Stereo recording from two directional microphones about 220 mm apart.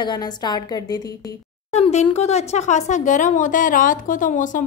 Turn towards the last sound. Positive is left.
turn(degrees=35)  # may be behind; listen again after turning